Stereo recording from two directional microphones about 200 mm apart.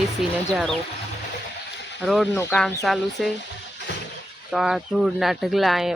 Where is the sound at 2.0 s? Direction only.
Centre (ahead or behind).